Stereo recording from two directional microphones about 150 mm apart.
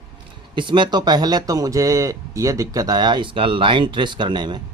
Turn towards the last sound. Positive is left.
turn(degrees=-30)  # may be behind; listen again after turning